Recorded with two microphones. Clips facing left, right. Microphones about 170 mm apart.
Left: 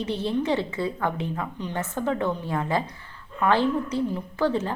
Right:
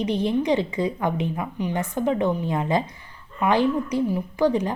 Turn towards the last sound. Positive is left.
turn(degrees=-15)  # may be behind; listen again after turning